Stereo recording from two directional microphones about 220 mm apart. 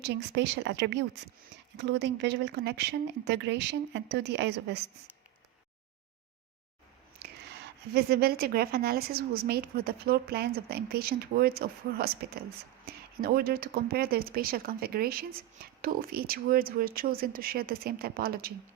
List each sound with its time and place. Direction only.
0.0 s a woman's voice: 50° right (ahead or behind)
7.9 s a woman's voice: 45° right (ahead or behind)